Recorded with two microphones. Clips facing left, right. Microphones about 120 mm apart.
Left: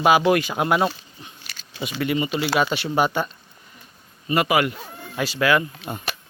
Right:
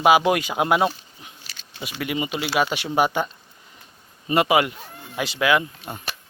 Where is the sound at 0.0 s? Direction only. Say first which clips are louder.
Even; 15° right (ahead or behind).